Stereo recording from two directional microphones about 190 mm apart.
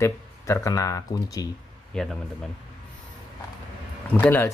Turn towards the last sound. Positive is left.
turn(degrees=10)  # may be behind; listen again after turning